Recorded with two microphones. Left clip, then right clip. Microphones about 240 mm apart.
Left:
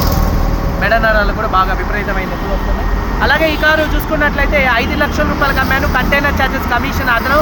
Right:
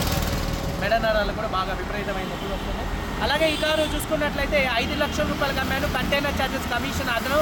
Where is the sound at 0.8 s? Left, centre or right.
Right.